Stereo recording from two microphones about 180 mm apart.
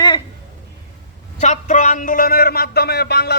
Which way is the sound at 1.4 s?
40° left (ahead or behind).